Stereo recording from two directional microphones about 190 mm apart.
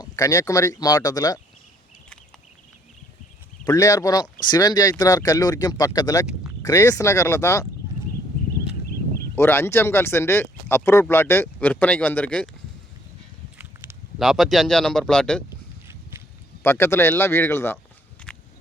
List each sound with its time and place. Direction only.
0.0 s speech: 15° left (ahead or behind)
3.6 s speech: 20° left (ahead or behind)
9.3 s speech: 15° left (ahead or behind)
13.6 s speech: 5° right (ahead or behind)
16.6 s speech: 10° left (ahead or behind)